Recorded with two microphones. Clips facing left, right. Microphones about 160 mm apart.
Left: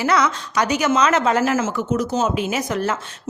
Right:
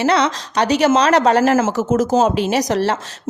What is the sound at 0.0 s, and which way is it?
A woman's voice, 30° right (ahead or behind).